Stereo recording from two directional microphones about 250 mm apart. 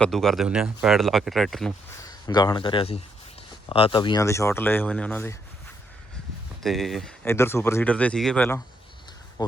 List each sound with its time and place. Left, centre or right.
0.0 s speech: centre
2.0 s speech: centre
6.6 s speech: centre